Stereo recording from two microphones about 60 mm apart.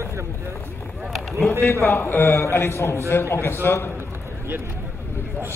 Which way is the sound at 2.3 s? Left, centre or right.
Left.